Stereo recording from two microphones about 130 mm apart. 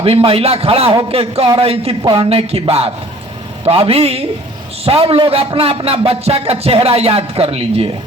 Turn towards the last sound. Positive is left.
turn(degrees=-50)  # may be behind; listen again after turning